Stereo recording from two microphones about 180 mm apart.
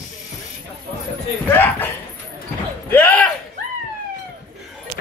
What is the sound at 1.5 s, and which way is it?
Speech, 10° left (ahead or behind).